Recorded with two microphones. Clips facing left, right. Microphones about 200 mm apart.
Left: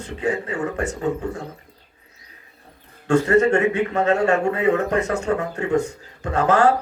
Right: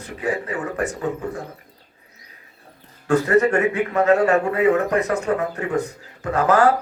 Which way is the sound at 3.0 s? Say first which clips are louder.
Left 1 dB; 25° left (ahead or behind).